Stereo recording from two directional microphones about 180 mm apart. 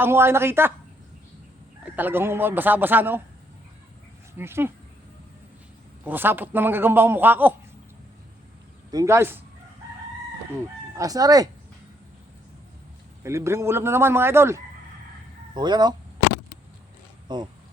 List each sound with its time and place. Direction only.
0.0 s a man's voice: 15° right (ahead or behind)
1.8 s a man's voice: 10° right (ahead or behind)
4.4 s a man's voice: 10° right (ahead or behind)
6.1 s a man's voice: 10° right (ahead or behind)
8.9 s a man's voice: 15° right (ahead or behind)
10.9 s speech: 20° right (ahead or behind)
13.2 s a man's voice: 15° right (ahead or behind)
17.2 s speech: 25° right (ahead or behind)